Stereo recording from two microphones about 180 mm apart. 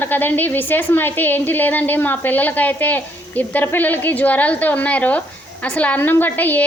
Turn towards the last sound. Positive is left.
turn(degrees=10)  # may be behind; listen again after turning